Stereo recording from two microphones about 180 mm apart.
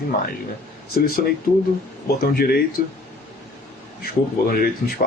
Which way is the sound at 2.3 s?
60° left (ahead or behind).